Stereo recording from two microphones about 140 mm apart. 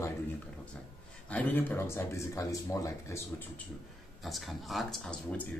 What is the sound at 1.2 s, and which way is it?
Speech, 10° left (ahead or behind).